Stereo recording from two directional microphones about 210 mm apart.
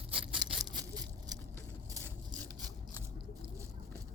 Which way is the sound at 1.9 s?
15° right (ahead or behind).